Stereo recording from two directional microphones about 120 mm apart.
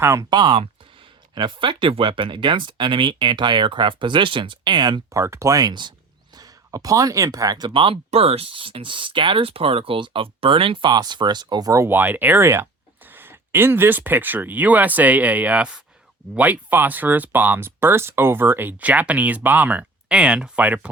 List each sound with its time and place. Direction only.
0.0 s speech: 25° right (ahead or behind)
0.3 s speech: 40° right (ahead or behind)
5.1 s speech: 25° right (ahead or behind)
7.7 s speech: 50° right (ahead or behind); by 20.9 s 10° right (ahead or behind)